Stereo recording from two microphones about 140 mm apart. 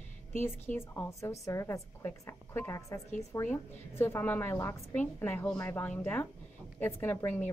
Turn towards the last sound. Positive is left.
turn(degrees=15)  # may be behind; listen again after turning